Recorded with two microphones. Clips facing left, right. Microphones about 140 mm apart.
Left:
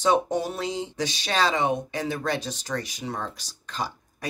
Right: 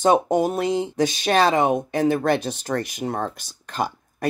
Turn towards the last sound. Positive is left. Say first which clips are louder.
# right 7 dB
turn(degrees=-55)  # may be behind; listen again after turning